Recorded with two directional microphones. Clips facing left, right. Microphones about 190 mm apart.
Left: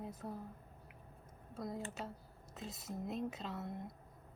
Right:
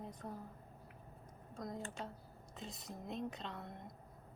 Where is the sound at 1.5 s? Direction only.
5° left (ahead or behind).